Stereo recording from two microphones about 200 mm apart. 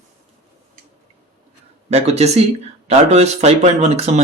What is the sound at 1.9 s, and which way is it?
Speech, 30° right (ahead or behind).